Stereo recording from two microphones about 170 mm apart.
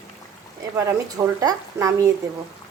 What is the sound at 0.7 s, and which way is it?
A woman's voice, 20° right (ahead or behind).